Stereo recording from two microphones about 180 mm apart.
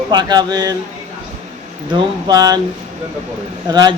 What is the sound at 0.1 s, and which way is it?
Speech, 25° right (ahead or behind).